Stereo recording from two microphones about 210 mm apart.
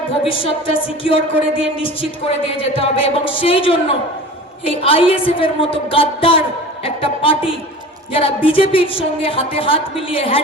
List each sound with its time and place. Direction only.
0.3 s speech: 25° left (ahead or behind)